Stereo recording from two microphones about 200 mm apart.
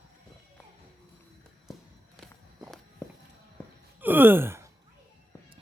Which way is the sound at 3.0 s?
10° left (ahead or behind).